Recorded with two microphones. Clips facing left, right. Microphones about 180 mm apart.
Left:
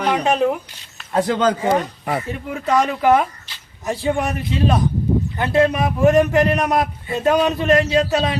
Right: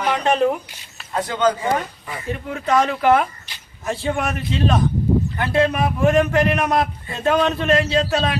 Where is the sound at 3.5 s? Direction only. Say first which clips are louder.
Even; 15° right (ahead or behind).